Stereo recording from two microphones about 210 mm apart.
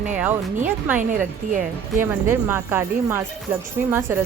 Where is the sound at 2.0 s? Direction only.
10° right (ahead or behind).